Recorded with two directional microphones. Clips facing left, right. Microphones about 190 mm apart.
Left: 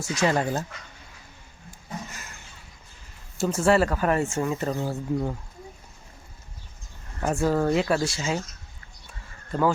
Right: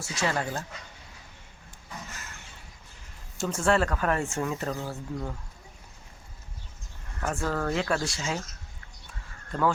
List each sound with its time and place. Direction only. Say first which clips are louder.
0.0 s speech: left 6 dB; 20° left (ahead or behind)
3.3 s speech: left 4 dB; 5° left (ahead or behind)
4.7 s speech: left 6 dB; 20° left (ahead or behind)
7.2 s speech: left 6 dB; 15° left (ahead or behind)
9.5 s speech: left 3 dB; 5° left (ahead or behind)